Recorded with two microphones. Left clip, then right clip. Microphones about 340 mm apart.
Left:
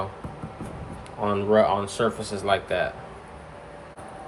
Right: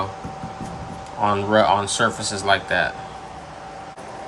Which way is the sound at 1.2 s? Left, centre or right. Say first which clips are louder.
Right 3 dB; centre.